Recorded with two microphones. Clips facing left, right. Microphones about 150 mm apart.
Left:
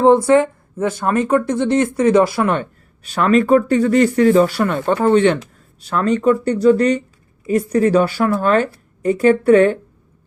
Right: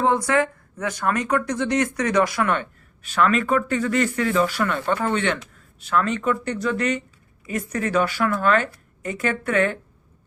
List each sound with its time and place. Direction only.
0.0 s speech: 30° left (ahead or behind)